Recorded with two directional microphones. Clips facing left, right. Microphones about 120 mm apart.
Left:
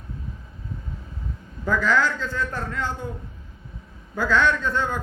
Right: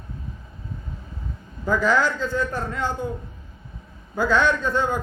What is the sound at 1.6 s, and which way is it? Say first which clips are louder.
A man's voice: right 1 dB; 15° right (ahead or behind).